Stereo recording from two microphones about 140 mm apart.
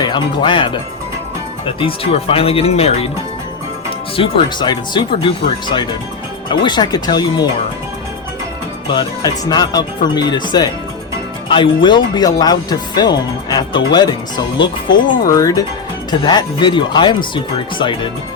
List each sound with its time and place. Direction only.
0.0 s speech: 35° left (ahead or behind)
3.8 s speech: 35° left (ahead or behind)
8.9 s speech: 30° left (ahead or behind)